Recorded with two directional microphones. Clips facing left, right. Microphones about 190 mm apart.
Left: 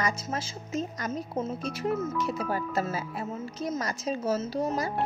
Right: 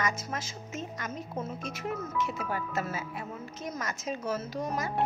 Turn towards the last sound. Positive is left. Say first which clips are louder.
# left 4 dB
turn(degrees=30)  # may be behind; listen again after turning